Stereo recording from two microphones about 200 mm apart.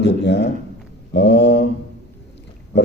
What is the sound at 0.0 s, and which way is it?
A man's voice, 60° left (ahead or behind).